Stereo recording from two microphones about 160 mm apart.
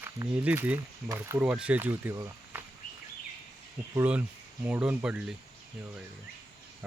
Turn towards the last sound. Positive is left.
turn(degrees=-5)  # may be behind; listen again after turning